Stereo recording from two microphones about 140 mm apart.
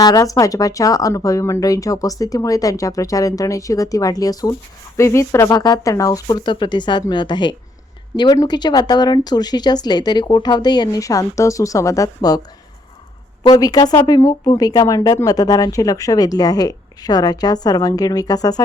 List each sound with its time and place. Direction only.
0.0 s speech: 25° left (ahead or behind)
13.4 s speech: 30° left (ahead or behind)